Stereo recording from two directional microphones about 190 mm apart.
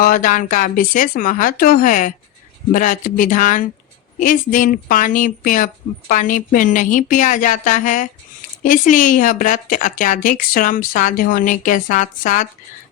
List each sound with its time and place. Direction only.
0.0 s speech: 45° left (ahead or behind)